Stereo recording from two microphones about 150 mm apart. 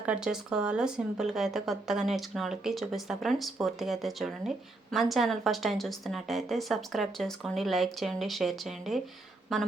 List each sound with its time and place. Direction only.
0.0 s speech: 5° right (ahead or behind)